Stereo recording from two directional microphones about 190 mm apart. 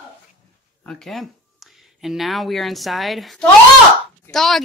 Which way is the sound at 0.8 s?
Centre (ahead or behind).